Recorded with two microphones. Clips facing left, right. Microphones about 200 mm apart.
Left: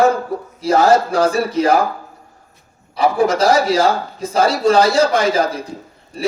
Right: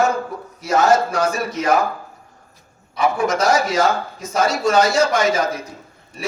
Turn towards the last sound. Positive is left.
turn(degrees=30)  # may be behind; listen again after turning